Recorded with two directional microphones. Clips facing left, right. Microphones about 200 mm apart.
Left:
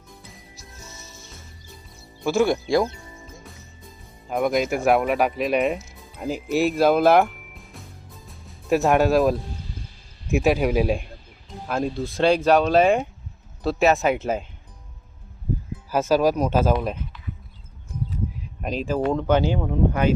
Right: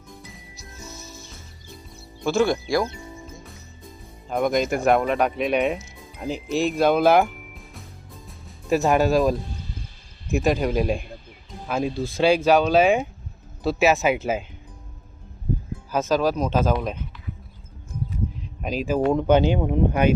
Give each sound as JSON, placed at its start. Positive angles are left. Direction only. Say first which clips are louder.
{"t": 0.9, "sound": "music", "louder": "right 4 dB", "side_deg": 0}
{"t": 2.1, "sound": "speech", "louder": "left 1 dB", "side_deg": 10}
{"t": 4.3, "sound": "speech", "louder": "even", "side_deg": 5}
{"t": 15.9, "sound": "speech", "louder": "left 2 dB", "side_deg": 10}
{"t": 18.3, "sound": "a sound", "louder": "right 1 dB", "side_deg": 0}
{"t": 18.9, "sound": "speech", "louder": "right 3 dB", "side_deg": -10}